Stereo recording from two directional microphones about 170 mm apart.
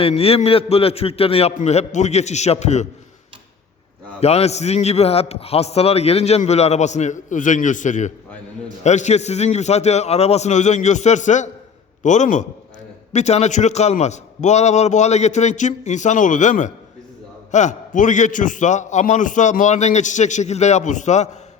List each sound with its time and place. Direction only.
0.0 s a man's voice: 35° left (ahead or behind)
4.2 s a man's voice: 40° left (ahead or behind)